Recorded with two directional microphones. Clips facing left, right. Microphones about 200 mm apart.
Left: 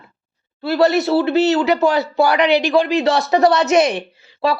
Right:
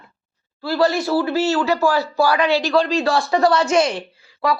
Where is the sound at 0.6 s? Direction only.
20° left (ahead or behind).